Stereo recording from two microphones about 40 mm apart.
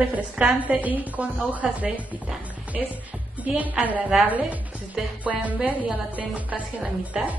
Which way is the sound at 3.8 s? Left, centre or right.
Right.